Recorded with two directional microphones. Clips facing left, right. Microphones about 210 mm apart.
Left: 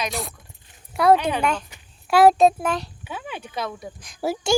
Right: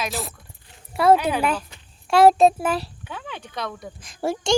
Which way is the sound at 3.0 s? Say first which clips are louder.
Left 2 dB; 5° left (ahead or behind).